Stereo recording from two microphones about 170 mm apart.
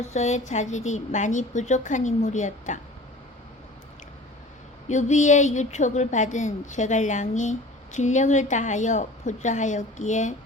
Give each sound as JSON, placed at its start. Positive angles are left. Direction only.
{"t": 0.0, "sound": "a woman's voice", "side_deg": 45}
{"t": 4.9, "sound": "a woman's voice", "side_deg": 45}